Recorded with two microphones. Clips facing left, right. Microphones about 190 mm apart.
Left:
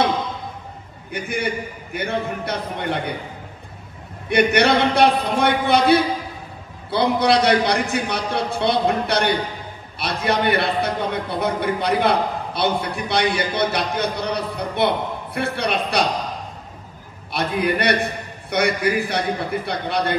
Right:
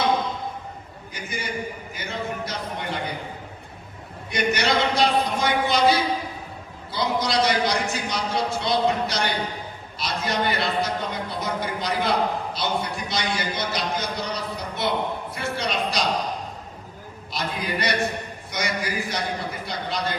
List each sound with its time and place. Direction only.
1.1 s a man's voice: 60° left (ahead or behind)
4.3 s a man's voice: 60° left (ahead or behind)
17.3 s a man's voice: 60° left (ahead or behind)